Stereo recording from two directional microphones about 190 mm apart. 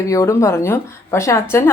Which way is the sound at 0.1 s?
15° left (ahead or behind).